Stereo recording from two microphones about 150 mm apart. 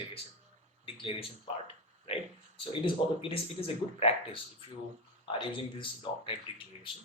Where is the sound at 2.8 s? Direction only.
40° left (ahead or behind).